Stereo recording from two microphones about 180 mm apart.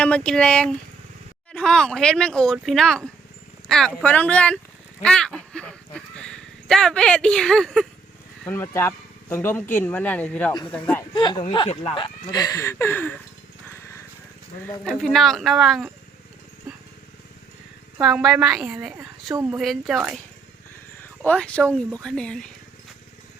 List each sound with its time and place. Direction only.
0.0 s speech: 5° left (ahead or behind)
8.4 s speech: 15° left (ahead or behind)
11.1 s speech: 25° left (ahead or behind)
13.7 s lawn mower: 15° left (ahead or behind)
14.8 s speech: 5° left (ahead or behind)
18.0 s speech: centre (ahead or behind)
21.2 s speech: 5° left (ahead or behind)